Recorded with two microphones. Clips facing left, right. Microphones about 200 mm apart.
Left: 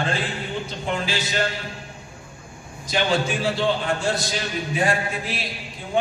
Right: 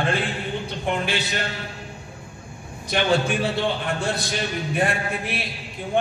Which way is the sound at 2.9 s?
60° right (ahead or behind).